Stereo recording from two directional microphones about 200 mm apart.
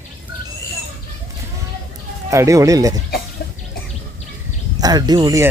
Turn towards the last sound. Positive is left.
turn(degrees=-20)  # may be behind; listen again after turning